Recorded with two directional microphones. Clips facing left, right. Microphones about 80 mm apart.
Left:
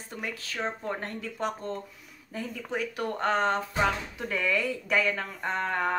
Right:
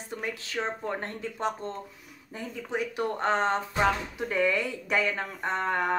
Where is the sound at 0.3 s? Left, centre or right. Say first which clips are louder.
Right 1 dB; right.